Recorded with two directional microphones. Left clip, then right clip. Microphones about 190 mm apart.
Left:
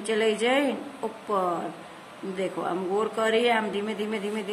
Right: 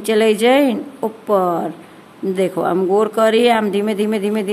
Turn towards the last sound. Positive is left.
turn(degrees=-50)  # may be behind; listen again after turning